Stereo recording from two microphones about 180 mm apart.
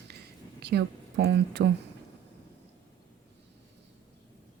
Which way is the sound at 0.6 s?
65° right (ahead or behind).